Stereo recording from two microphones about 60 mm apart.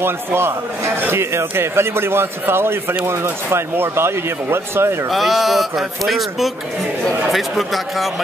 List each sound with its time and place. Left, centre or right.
0.0 s a man's voice: right
5.1 s speech: centre